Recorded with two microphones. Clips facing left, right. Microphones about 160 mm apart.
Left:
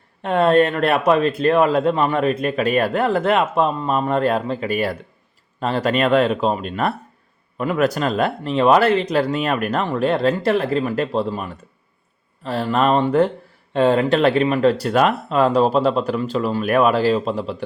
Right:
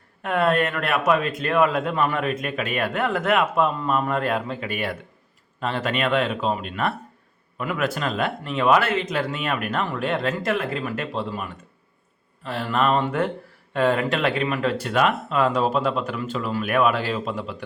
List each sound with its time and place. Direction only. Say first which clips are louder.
0.2 s speech: left 6 dB; 30° left (ahead or behind)